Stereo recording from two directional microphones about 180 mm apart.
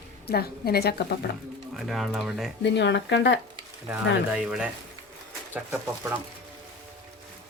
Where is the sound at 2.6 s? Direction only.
75° left (ahead or behind).